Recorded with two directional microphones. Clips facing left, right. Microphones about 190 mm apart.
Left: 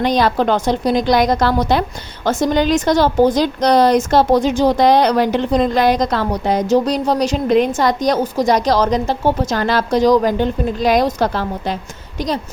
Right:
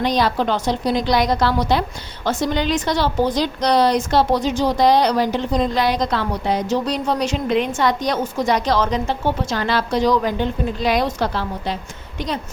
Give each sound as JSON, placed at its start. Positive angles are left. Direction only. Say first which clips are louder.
{"t": 0.0, "sound": "a woman's voice", "louder": "left 4 dB", "side_deg": 50}